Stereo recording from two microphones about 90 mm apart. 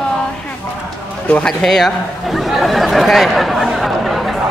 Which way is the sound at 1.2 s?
10° left (ahead or behind).